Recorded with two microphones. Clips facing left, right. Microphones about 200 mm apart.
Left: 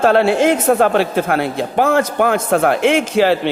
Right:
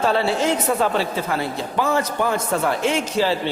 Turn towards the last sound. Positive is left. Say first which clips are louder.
# left 6 dB
turn(degrees=65)  # may be behind; listen again after turning